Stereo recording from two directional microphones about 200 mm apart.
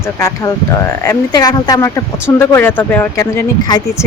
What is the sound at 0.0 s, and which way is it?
Speech, 15° left (ahead or behind).